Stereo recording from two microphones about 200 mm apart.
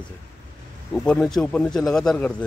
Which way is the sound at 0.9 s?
5° left (ahead or behind).